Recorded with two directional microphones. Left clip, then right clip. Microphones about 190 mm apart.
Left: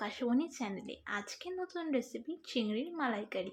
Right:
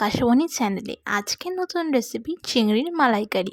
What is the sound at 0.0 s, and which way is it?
A woman's voice, 55° right (ahead or behind).